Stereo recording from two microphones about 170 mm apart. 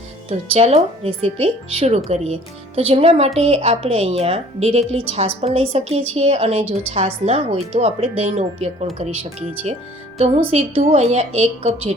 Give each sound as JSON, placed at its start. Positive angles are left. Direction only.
{"t": 0.3, "sound": "speech", "side_deg": -35}
{"t": 10.2, "sound": "speech", "side_deg": -40}